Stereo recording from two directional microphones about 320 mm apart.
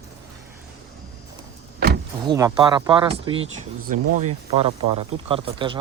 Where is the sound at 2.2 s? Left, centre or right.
Centre.